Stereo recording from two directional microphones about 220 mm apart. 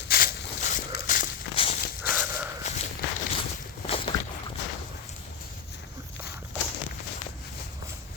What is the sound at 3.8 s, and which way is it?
Boat, 25° left (ahead or behind).